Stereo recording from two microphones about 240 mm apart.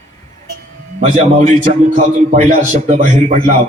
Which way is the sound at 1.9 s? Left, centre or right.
Right.